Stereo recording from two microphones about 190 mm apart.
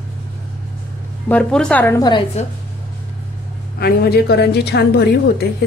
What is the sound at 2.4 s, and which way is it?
Speech, 35° left (ahead or behind).